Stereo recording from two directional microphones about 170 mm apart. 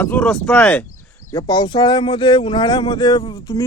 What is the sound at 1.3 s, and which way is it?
Speech, 20° left (ahead or behind).